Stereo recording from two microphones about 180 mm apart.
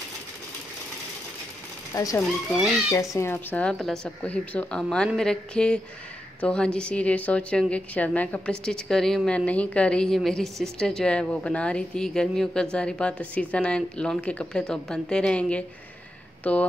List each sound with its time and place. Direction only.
2.0 s a woman's voice: 20° left (ahead or behind)